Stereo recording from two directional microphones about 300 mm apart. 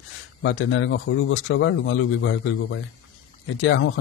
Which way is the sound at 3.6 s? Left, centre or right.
Left.